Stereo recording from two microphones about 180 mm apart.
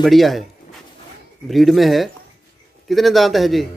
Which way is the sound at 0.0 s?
Centre (ahead or behind).